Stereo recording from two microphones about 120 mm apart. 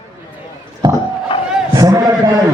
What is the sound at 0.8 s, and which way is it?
Crowd, 35° right (ahead or behind).